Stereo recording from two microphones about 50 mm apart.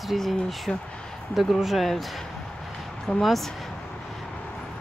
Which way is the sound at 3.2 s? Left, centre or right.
Centre.